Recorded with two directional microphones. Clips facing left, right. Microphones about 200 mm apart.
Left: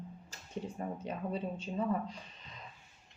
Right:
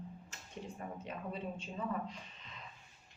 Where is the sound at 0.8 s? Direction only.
30° left (ahead or behind).